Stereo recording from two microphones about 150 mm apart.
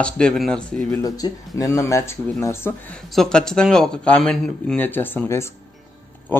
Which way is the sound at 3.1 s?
5° left (ahead or behind).